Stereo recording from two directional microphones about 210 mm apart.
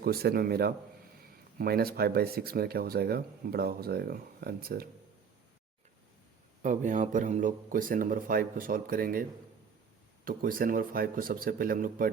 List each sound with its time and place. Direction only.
0.0 s speech: 45° right (ahead or behind)
6.6 s speech: 35° right (ahead or behind)
10.2 s speech: 45° right (ahead or behind)